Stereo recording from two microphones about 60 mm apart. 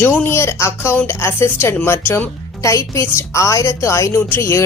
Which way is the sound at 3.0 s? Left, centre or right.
Left.